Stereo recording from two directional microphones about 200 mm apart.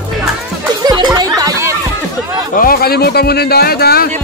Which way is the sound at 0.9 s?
20° right (ahead or behind).